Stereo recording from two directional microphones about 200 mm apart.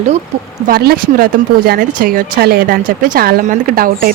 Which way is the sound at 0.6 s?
50° right (ahead or behind).